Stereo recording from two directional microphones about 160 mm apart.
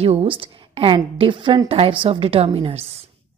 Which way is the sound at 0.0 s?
40° right (ahead or behind).